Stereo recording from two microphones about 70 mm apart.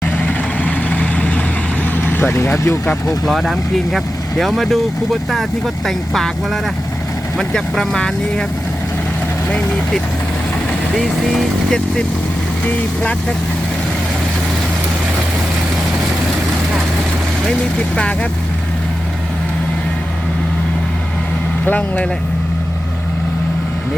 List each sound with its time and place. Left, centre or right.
0.2 s vehicle: left
2.0 s speech: left
3.2 s speech: centre
10.9 s speech: centre
12.6 s speech: centre
17.9 s speech: centre
21.6 s speech: left